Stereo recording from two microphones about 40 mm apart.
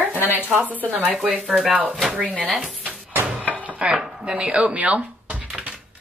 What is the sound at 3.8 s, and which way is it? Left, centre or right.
Speech, right.